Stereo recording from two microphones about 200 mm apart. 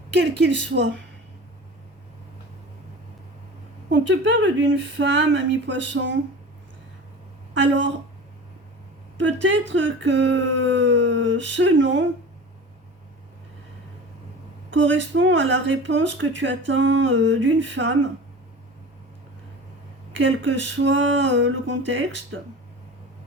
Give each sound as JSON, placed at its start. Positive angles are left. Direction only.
{"t": 0.2, "sound": "a woman's voice", "side_deg": -60}
{"t": 3.9, "sound": "speech", "side_deg": -65}
{"t": 7.5, "sound": "a woman's voice", "side_deg": -65}
{"t": 9.1, "sound": "speech", "side_deg": -70}
{"t": 14.7, "sound": "speech", "side_deg": -70}
{"t": 20.1, "sound": "speech", "side_deg": -65}